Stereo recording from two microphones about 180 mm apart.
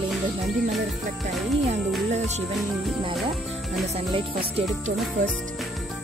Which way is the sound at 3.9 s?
30° right (ahead or behind).